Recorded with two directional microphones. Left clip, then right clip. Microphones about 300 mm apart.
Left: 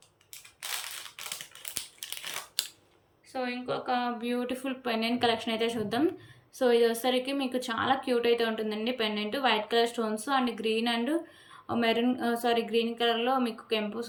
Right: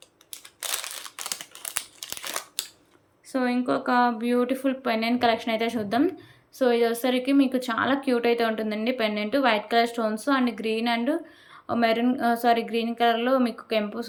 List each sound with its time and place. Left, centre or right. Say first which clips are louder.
1.0 s crumpling: right 5 dB; centre
3.3 s speech: right 7 dB; centre